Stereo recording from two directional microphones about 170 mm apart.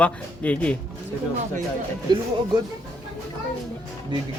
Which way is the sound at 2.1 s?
25° right (ahead or behind).